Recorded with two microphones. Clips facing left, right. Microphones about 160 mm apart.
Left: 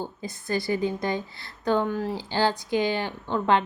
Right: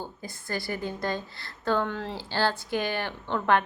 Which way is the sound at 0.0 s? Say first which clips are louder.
Left 5 dB; 20° left (ahead or behind).